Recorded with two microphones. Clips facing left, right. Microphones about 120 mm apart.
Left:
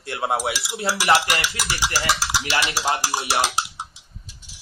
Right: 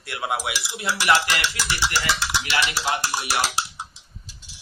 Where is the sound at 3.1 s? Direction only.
25° left (ahead or behind).